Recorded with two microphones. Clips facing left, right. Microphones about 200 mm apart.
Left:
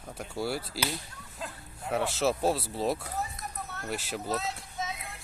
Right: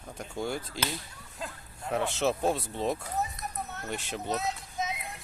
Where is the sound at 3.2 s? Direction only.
20° right (ahead or behind).